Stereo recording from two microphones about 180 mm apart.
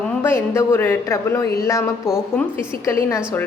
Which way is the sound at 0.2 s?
15° left (ahead or behind).